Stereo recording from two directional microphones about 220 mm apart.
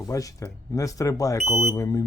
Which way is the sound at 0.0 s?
15° left (ahead or behind).